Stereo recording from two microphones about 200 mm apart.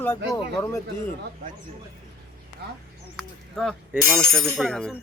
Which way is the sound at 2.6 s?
55° right (ahead or behind).